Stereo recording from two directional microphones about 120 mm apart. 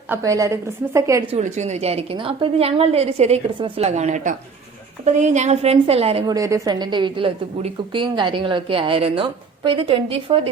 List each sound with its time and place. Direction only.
0.2 s a woman's voice: 25° right (ahead or behind)
1.4 s a woman's voice: 70° right (ahead or behind)
2.1 s a woman's voice: 45° right (ahead or behind)
6.2 s a woman's voice: 30° right (ahead or behind); by 10.4 s 50° right (ahead or behind)